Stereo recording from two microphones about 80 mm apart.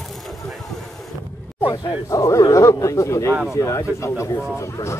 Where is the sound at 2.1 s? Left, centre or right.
Left.